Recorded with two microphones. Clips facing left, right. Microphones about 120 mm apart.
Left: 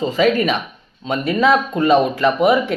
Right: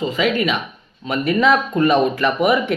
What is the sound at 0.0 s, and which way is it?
Speech, 35° left (ahead or behind).